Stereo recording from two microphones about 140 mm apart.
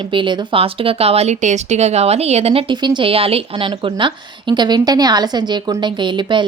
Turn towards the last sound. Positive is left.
turn(degrees=-35)  # may be behind; listen again after turning